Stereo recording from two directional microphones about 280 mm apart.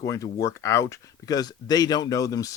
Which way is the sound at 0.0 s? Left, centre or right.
Centre.